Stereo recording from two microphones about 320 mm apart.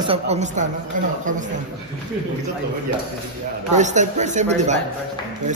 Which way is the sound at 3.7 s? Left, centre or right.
Right.